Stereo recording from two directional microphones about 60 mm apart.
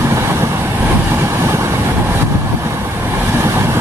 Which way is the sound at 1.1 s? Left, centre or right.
Right.